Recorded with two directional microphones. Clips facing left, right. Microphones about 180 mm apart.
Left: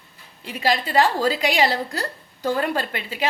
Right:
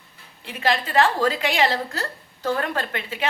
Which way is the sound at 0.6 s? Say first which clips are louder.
Left 1 dB; 10° left (ahead or behind).